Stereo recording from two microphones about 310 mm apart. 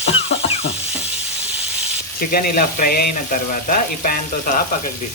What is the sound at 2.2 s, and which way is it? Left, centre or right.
Frying, left.